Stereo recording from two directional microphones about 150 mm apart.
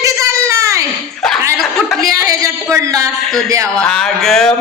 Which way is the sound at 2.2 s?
20° right (ahead or behind).